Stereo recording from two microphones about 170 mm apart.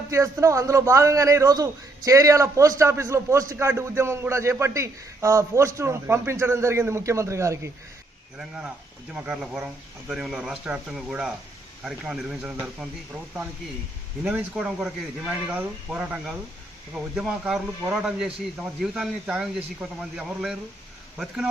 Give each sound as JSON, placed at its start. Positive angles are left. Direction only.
{"t": 0.1, "sound": "a man's voice", "side_deg": -20}
{"t": 8.4, "sound": "speech", "side_deg": -5}
{"t": 14.3, "sound": "speech", "side_deg": -5}